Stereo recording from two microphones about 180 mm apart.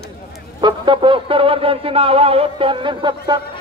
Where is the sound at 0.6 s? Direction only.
25° right (ahead or behind).